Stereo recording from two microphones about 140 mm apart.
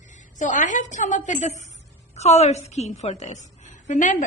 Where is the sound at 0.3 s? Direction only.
60° left (ahead or behind).